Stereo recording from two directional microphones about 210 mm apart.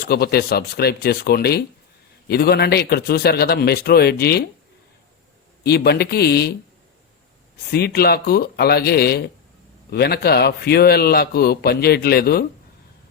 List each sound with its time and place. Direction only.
0.0 s a man's voice: 50° left (ahead or behind)
5.6 s a man's voice: 50° left (ahead or behind)
7.7 s a man's voice: 50° left (ahead or behind)